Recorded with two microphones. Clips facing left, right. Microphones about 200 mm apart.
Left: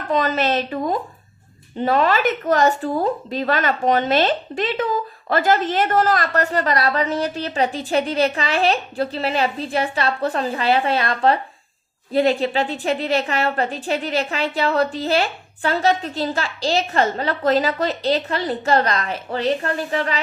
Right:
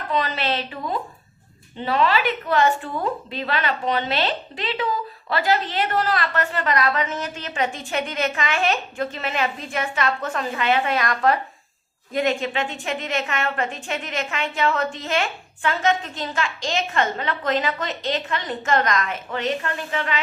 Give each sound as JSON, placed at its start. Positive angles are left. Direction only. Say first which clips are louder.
{"t": 0.1, "sound": "a woman's voice", "louder": "left 5 dB", "side_deg": 45}